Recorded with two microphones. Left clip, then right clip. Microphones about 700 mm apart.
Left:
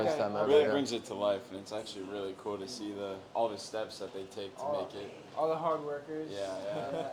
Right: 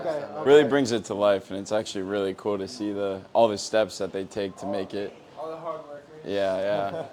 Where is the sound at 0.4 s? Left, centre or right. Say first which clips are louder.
Right 10 dB; right.